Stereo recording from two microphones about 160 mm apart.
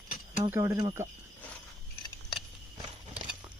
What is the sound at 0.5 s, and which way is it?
Speech, 20° right (ahead or behind).